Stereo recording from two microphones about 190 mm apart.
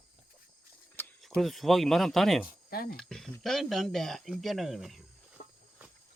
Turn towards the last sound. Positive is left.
turn(degrees=50)  # may be behind; listen again after turning